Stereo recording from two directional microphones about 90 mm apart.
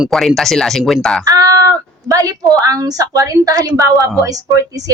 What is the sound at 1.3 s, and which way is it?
A woman's voice, 40° right (ahead or behind).